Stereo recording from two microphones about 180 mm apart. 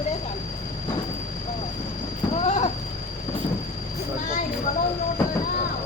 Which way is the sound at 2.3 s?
40° left (ahead or behind).